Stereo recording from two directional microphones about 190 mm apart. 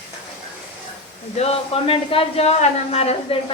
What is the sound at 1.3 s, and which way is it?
A man's voice, 30° left (ahead or behind).